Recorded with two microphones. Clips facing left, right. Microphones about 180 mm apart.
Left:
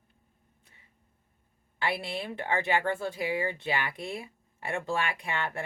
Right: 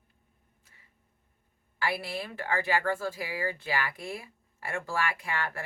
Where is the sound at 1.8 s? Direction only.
25° left (ahead or behind).